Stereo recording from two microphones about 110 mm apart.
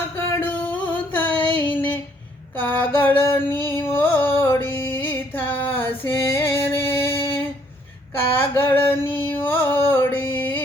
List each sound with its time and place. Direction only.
0.2 s music: 20° left (ahead or behind)
2.6 s a sound: 15° left (ahead or behind)
3.9 s music: 20° left (ahead or behind)
8.4 s music: 20° left (ahead or behind)